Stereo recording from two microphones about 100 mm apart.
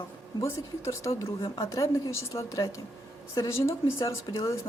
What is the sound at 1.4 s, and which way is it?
Speech, 45° left (ahead or behind).